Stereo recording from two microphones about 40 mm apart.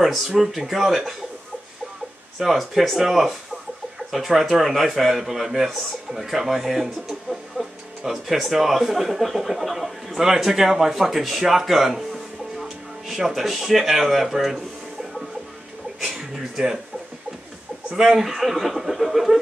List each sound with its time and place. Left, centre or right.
0.0 s speech: centre
2.3 s speech: centre
4.1 s a man's voice: centre
17.9 s speech: centre
18.2 s speech: centre